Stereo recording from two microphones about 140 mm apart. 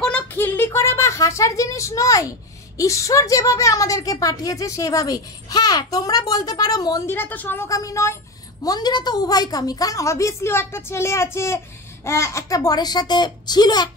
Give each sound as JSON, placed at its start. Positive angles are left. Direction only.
{"t": 0.0, "sound": "a sound", "side_deg": 10}
{"t": 2.8, "sound": "a woman's voice", "side_deg": 20}
{"t": 7.2, "sound": "a woman's voice", "side_deg": 15}